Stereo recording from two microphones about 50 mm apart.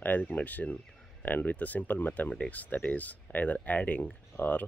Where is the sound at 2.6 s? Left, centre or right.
Left.